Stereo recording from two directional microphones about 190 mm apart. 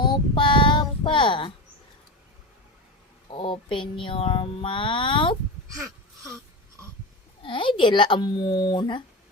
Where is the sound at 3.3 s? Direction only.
25° left (ahead or behind).